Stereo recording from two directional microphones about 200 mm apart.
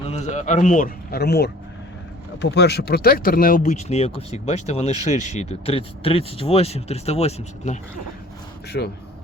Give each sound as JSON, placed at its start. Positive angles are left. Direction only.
{"t": 0.1, "sound": "speech", "side_deg": 35}
{"t": 8.7, "sound": "speech", "side_deg": 50}